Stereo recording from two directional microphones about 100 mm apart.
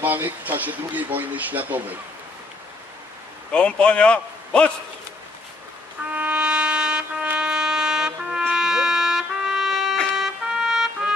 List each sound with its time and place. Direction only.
0.0 s speech: 20° right (ahead or behind)
3.5 s a man's voice: 10° left (ahead or behind)
6.1 s music: 15° right (ahead or behind)
10.1 s trumpet: 5° right (ahead or behind)